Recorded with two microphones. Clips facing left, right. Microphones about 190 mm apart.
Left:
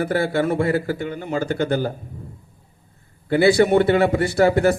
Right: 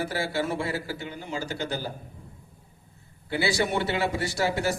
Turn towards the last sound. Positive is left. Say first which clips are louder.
# left 10 dB
turn(degrees=55)  # may be behind; listen again after turning